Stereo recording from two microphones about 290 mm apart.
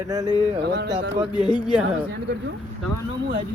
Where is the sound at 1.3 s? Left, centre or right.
Centre.